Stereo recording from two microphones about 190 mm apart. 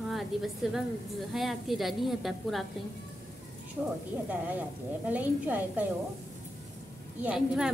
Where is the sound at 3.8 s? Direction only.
10° right (ahead or behind).